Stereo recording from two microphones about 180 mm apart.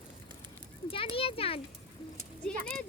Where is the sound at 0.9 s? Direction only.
30° left (ahead or behind).